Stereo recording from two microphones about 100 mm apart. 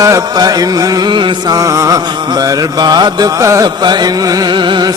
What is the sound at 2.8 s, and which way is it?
Music, 45° right (ahead or behind).